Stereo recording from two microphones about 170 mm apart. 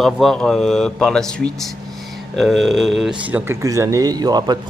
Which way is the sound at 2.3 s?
Centre (ahead or behind).